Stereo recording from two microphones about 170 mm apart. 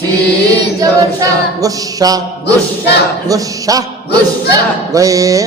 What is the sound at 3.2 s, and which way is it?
Speech, 20° right (ahead or behind).